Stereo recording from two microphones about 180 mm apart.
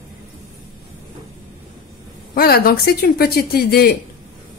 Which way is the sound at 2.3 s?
55° left (ahead or behind).